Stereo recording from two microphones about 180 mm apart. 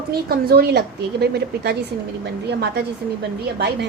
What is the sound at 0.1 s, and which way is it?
A woman's voice, 60° right (ahead or behind).